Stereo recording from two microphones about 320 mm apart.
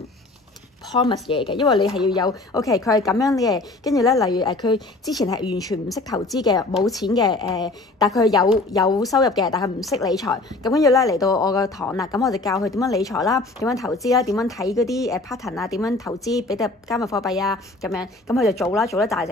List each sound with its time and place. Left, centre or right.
0.9 s a woman's voice: centre
17.3 s a woman's voice: centre